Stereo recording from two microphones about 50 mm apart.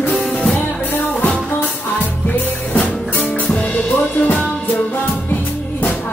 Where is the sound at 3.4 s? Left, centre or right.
Left.